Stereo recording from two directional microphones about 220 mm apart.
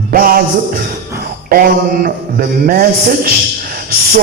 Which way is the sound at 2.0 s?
40° right (ahead or behind).